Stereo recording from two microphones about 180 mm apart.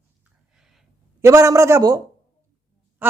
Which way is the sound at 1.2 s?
15° right (ahead or behind).